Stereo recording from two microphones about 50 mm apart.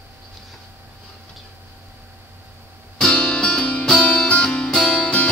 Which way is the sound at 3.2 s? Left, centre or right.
Centre.